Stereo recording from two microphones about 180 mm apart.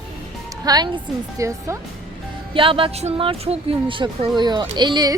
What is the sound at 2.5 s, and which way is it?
Speech, 30° right (ahead or behind).